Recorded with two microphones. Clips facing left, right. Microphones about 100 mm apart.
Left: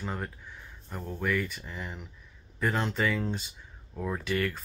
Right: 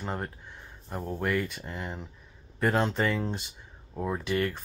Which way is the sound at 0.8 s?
30° right (ahead or behind).